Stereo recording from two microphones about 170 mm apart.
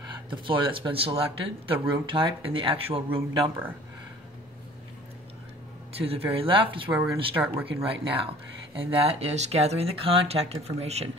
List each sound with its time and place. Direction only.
0.3 s speech: 30° right (ahead or behind)
5.9 s a man's voice: 35° right (ahead or behind)
6.9 s speech: 5° right (ahead or behind)
7.9 s speech: 35° right (ahead or behind)